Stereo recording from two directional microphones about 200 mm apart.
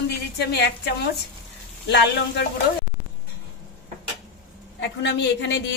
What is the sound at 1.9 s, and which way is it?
Speech, 60° left (ahead or behind).